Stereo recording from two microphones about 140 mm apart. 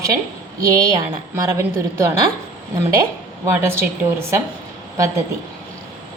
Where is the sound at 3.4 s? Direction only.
20° right (ahead or behind).